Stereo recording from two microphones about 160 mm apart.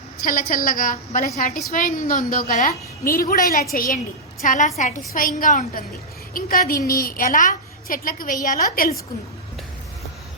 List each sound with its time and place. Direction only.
0.2 s a woman's voice: 60° left (ahead or behind)
4.4 s a woman's voice: 50° left (ahead or behind)